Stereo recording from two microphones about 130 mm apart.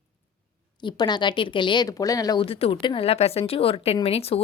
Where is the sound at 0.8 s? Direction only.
35° left (ahead or behind).